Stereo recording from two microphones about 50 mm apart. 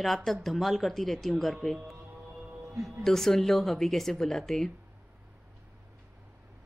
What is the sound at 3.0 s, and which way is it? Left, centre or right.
A woman's voice, centre.